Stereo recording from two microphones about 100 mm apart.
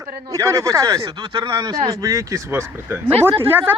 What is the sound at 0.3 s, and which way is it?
Speech, 30° right (ahead or behind).